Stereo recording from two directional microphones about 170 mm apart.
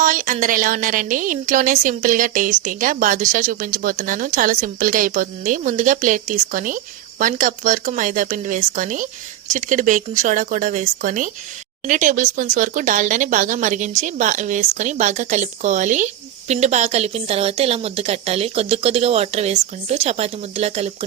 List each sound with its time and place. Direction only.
0.0 s a woman's voice: 50° right (ahead or behind)